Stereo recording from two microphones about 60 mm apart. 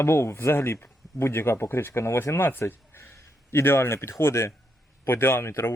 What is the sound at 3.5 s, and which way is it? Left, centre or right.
Speech, left.